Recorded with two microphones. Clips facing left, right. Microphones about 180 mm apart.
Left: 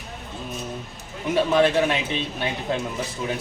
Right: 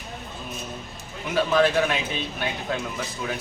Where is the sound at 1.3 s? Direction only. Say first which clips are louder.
Left 1 dB; 25° left (ahead or behind).